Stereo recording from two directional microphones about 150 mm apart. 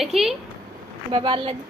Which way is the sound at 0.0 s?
Centre (ahead or behind).